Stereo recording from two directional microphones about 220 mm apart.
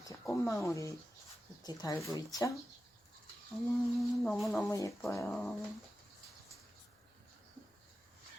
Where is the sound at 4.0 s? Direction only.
Centre (ahead or behind).